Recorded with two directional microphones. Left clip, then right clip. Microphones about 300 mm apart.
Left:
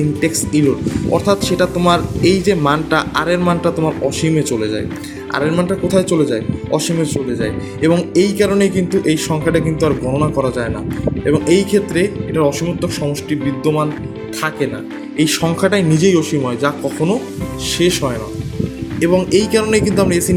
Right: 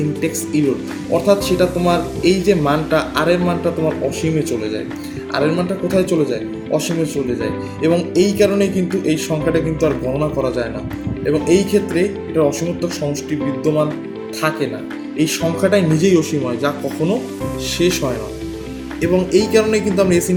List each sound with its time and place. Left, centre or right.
0.2 s a man's voice: left
15.2 s speech: left